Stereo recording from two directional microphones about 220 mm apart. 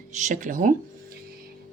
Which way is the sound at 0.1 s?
35° right (ahead or behind).